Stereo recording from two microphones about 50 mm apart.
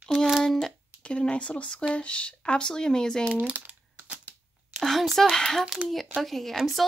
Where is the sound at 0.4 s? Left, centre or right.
Centre.